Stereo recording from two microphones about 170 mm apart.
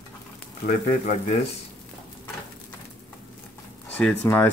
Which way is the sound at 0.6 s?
45° left (ahead or behind).